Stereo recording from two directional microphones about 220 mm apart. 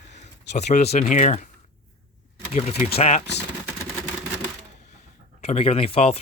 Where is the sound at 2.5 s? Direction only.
30° left (ahead or behind).